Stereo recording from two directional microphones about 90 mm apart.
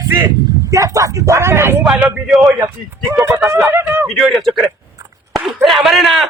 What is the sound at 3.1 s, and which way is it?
Speech, 30° right (ahead or behind).